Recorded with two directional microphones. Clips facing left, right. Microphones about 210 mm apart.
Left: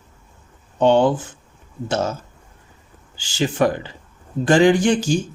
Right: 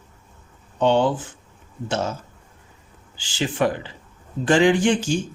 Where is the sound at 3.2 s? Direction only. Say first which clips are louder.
Left 3 dB; 40° left (ahead or behind).